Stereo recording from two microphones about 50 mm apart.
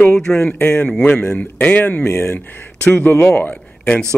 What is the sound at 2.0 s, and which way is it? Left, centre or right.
Speech, left.